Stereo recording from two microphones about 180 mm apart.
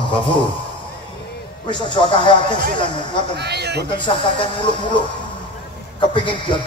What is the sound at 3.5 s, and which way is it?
Speech, 65° right (ahead or behind).